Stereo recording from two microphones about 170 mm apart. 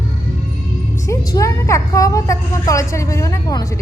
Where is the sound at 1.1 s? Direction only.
20° left (ahead or behind).